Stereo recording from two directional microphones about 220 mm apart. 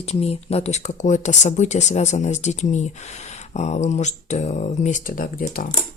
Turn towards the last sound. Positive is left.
turn(degrees=40)  # may be behind; listen again after turning